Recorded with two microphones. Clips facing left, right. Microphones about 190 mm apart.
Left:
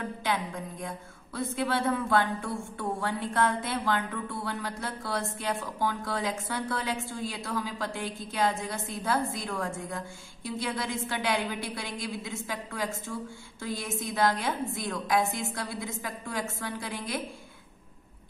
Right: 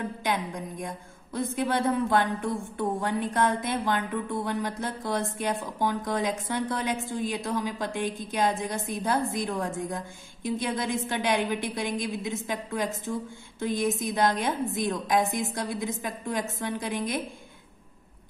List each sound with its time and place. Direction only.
0.2 s a woman's voice: 15° right (ahead or behind)